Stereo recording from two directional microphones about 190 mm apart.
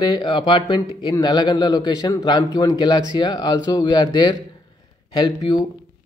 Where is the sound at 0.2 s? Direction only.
25° left (ahead or behind).